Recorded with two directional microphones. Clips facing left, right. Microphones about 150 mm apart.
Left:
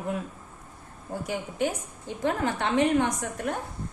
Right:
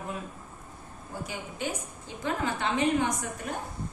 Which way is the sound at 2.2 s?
60° left (ahead or behind).